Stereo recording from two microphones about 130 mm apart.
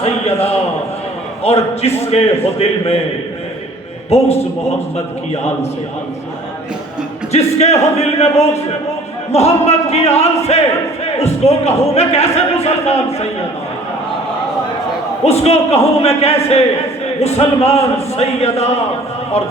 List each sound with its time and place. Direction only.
0.0 s a man's voice: 55° left (ahead or behind)
4.1 s a man's voice: 55° left (ahead or behind)
7.3 s music: 55° left (ahead or behind)
11.0 s a man's voice: 55° left (ahead or behind)
15.2 s a man's voice: 55° left (ahead or behind)